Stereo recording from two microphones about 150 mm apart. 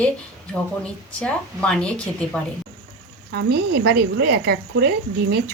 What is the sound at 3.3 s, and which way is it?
A woman's voice, 90° right.